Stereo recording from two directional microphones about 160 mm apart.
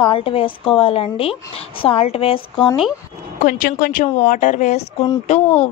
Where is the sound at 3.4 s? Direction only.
60° left (ahead or behind).